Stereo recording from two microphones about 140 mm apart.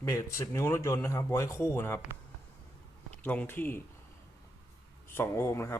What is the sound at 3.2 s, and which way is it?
Speech, 10° left (ahead or behind).